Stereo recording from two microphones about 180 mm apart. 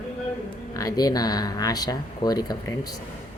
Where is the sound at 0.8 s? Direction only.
20° left (ahead or behind).